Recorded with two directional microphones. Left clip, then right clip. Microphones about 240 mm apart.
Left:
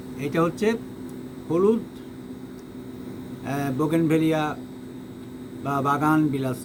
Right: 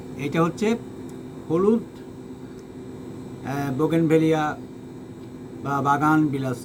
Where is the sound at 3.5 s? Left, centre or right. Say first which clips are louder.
Right 1 dB; centre.